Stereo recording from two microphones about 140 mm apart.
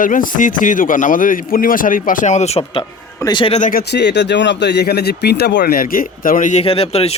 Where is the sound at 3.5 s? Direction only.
65° left (ahead or behind).